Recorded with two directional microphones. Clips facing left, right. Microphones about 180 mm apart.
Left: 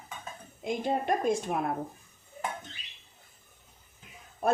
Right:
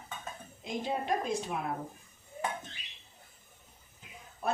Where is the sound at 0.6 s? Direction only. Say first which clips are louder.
Left 5 dB; 55° left (ahead or behind).